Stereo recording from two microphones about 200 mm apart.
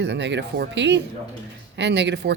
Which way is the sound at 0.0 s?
60° right (ahead or behind).